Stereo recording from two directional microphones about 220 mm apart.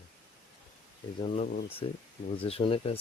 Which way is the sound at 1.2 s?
25° left (ahead or behind).